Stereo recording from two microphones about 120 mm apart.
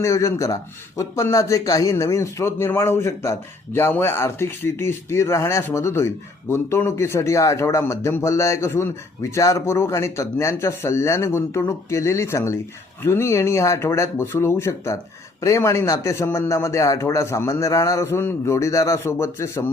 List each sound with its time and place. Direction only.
0.0 s speech: 25° left (ahead or behind)